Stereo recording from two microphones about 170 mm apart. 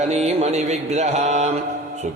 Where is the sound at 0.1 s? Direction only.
40° right (ahead or behind).